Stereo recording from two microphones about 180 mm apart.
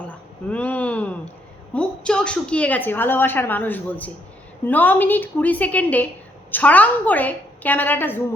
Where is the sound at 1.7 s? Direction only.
5° left (ahead or behind).